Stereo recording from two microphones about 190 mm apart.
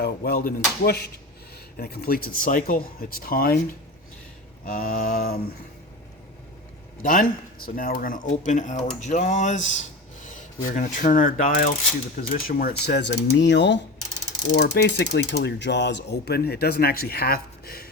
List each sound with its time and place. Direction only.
0.0 s speech: 55° left (ahead or behind)
4.6 s speech: 50° left (ahead or behind)
7.0 s speech: 50° left (ahead or behind)